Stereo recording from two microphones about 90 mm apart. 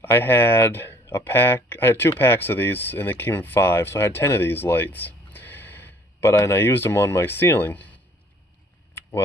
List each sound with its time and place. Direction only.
0.0 s speech: 25° left (ahead or behind)